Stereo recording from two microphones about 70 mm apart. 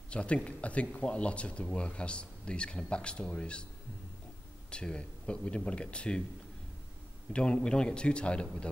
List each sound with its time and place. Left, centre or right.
0.1 s speech: centre
4.6 s speech: centre
7.3 s speech: centre